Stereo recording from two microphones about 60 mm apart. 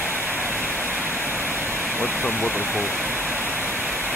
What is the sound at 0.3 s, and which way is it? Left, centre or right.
Waterfall, right.